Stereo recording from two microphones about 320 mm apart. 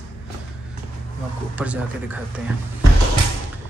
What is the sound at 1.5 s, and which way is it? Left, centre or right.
Speech, centre.